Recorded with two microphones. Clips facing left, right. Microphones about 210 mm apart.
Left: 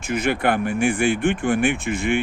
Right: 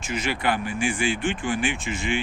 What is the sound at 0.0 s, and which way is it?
Speech, 55° left (ahead or behind).